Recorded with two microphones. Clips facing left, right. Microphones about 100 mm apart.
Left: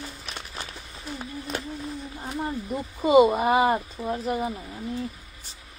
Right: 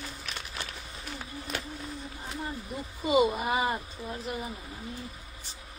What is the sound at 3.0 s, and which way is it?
Speech, 40° left (ahead or behind).